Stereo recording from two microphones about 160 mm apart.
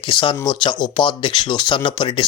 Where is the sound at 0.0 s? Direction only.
30° left (ahead or behind).